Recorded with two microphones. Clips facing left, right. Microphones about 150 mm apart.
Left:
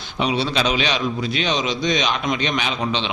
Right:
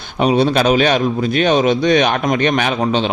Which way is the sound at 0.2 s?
50° right (ahead or behind).